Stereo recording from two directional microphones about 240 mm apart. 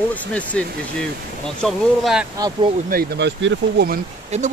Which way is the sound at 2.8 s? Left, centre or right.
Right.